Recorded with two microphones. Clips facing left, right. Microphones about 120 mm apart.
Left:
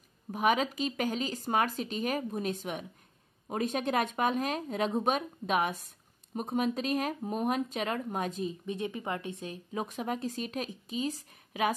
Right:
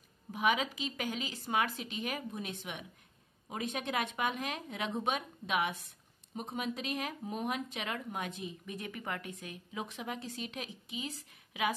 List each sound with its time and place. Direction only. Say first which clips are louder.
0.3 s speech: left 4 dB; 45° left (ahead or behind)
8.6 s speech: left 6 dB; 25° left (ahead or behind)
9.7 s speech: left 6 dB; 45° left (ahead or behind)